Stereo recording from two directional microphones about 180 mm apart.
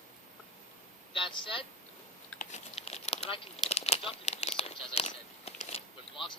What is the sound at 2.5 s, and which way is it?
Crumpling, 35° left (ahead or behind).